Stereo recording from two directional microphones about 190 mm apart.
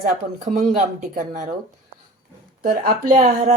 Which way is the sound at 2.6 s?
50° right (ahead or behind).